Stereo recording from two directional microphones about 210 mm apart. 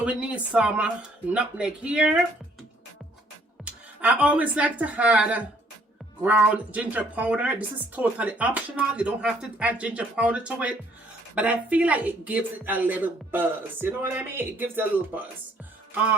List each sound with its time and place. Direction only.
0.0 s speech: 5° right (ahead or behind)
3.6 s speech: 5° right (ahead or behind)